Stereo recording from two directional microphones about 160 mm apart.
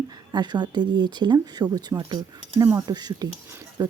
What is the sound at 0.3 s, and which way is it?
Speech, 25° right (ahead or behind).